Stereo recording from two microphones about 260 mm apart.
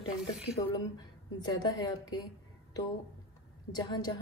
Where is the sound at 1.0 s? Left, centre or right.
Centre.